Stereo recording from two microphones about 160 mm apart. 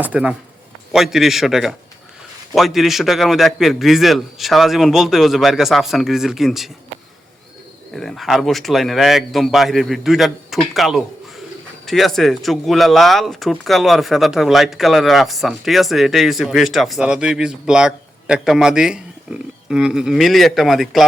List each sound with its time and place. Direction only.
0.0 s a man's voice: 10° right (ahead or behind)
7.9 s speech: centre (ahead or behind)